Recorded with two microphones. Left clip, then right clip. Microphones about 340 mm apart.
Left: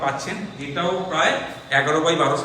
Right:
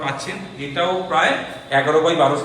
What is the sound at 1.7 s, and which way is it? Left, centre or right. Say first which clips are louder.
Speech: right 3 dB; right.